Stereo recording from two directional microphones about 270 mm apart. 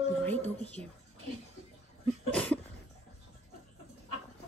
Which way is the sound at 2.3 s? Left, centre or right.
Centre.